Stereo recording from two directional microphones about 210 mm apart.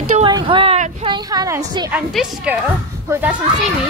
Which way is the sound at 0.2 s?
20° right (ahead or behind).